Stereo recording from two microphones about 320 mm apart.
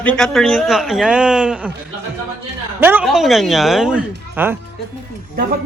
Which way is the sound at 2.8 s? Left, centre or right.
Centre.